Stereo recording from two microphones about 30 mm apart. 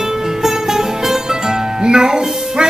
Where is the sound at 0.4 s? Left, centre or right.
Centre.